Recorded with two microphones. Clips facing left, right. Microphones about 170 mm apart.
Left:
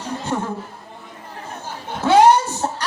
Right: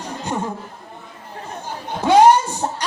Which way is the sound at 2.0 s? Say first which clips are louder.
Right 1 dB; 15° right (ahead or behind).